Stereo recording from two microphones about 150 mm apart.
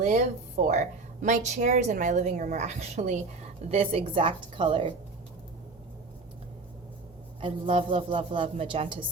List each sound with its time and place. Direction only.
0.0 s a woman's voice: 55° right (ahead or behind); by 4.9 s 35° right (ahead or behind)
7.4 s a woman's voice: 35° right (ahead or behind)